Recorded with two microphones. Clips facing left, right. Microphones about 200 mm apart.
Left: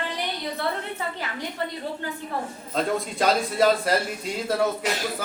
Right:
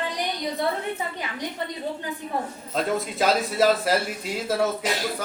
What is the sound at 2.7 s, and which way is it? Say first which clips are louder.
Speech: even; centre (ahead or behind).